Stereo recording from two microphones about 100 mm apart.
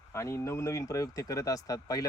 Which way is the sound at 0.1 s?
30° left (ahead or behind).